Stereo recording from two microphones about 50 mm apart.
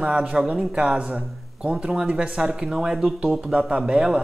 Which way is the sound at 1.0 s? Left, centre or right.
Right.